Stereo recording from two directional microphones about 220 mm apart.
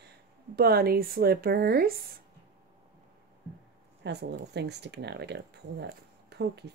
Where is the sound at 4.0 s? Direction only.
50° right (ahead or behind).